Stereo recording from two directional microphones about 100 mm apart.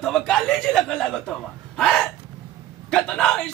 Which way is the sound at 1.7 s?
5° left (ahead or behind).